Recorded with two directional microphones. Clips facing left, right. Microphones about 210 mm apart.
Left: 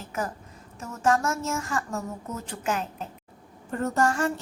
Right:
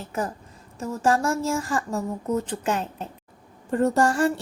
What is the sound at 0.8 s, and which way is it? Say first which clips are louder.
A woman's voice: right 2 dB; 30° right (ahead or behind).